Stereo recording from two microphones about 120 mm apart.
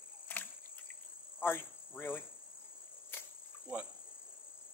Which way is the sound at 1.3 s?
15° left (ahead or behind).